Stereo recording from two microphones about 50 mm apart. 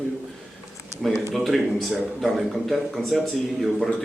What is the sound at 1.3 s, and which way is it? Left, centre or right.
Speech, centre.